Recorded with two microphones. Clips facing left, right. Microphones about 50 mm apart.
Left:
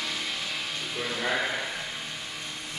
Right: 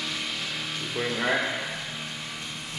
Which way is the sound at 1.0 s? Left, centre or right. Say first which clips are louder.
Right 4 dB; right.